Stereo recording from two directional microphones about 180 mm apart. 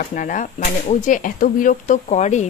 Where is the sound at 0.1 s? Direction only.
50° left (ahead or behind).